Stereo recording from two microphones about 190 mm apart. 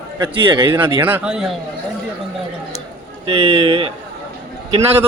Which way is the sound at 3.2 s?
30° right (ahead or behind).